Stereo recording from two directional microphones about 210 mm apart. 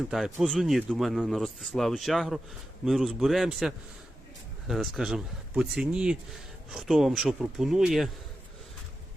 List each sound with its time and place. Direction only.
0.1 s speech: centre (ahead or behind)